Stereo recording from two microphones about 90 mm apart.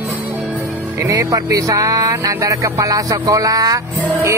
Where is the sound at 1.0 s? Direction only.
40° right (ahead or behind).